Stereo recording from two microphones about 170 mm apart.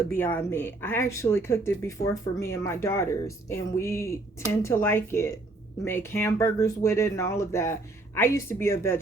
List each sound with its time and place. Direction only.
0.1 s speech: 10° left (ahead or behind)